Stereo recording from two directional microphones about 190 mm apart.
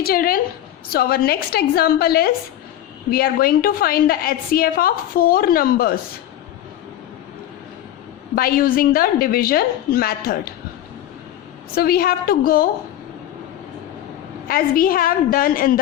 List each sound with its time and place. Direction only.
0.0 s a woman's voice: 50° left (ahead or behind)
8.4 s a woman's voice: 50° left (ahead or behind)
11.7 s a woman's voice: 50° left (ahead or behind)
14.4 s a woman's voice: 50° left (ahead or behind)